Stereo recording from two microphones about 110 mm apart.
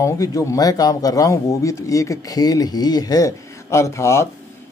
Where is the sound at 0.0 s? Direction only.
30° left (ahead or behind).